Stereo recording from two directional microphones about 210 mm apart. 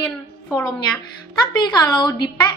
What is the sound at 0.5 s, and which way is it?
A woman's voice, 15° left (ahead or behind).